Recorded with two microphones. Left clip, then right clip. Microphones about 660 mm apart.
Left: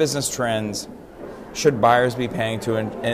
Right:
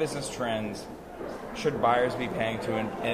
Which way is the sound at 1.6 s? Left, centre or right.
Left.